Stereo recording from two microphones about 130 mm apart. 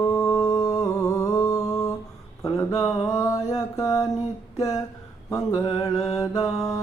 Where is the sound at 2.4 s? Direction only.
30° left (ahead or behind).